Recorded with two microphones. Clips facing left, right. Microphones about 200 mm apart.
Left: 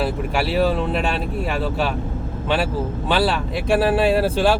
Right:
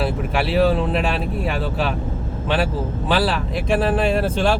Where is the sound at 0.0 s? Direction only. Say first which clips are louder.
Even; centre (ahead or behind).